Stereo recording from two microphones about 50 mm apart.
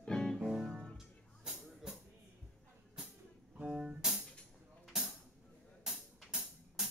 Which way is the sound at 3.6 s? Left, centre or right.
Centre.